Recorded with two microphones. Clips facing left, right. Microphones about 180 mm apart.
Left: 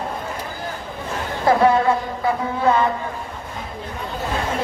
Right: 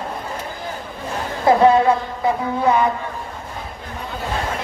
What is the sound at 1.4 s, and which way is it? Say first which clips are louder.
Speech: right 3 dB; 20° right (ahead or behind).